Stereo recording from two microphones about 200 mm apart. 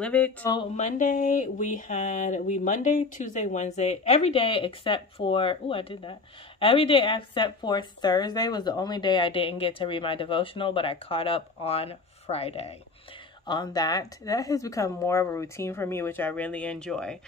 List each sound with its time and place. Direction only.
0.0 s speech: 5° left (ahead or behind)
0.7 s a woman's voice: 35° left (ahead or behind)
13.5 s speech: 20° left (ahead or behind); by 17.2 s 5° left (ahead or behind)